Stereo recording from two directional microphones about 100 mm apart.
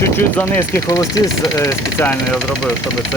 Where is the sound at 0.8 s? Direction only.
35° left (ahead or behind).